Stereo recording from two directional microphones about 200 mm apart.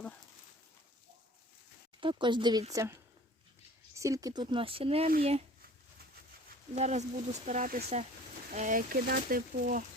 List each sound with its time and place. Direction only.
2.0 s speech: 25° right (ahead or behind)
6.7 s speech: 35° right (ahead or behind)